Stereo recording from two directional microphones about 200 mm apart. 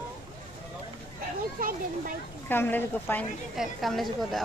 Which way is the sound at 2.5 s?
10° left (ahead or behind).